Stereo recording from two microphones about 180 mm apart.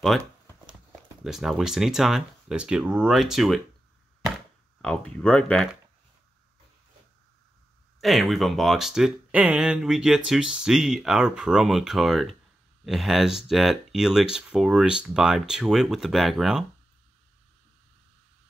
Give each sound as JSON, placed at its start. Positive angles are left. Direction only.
{"t": 1.2, "sound": "speech", "side_deg": 0}
{"t": 4.8, "sound": "speech", "side_deg": 5}
{"t": 8.0, "sound": "speech", "side_deg": 0}